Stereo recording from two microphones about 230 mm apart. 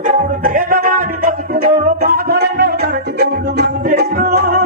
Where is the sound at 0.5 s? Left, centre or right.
Right.